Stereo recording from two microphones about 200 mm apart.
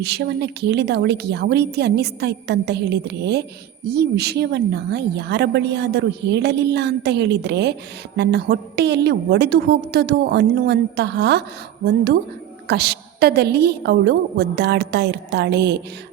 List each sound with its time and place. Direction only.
0.0 s speech: 55° right (ahead or behind)
12.6 s speech: 55° right (ahead or behind)